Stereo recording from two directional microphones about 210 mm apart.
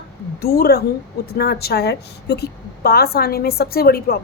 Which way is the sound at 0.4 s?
45° left (ahead or behind).